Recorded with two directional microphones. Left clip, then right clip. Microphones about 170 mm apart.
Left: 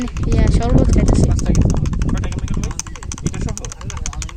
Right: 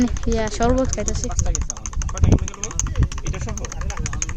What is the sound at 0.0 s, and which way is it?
Speech, 25° right (ahead or behind).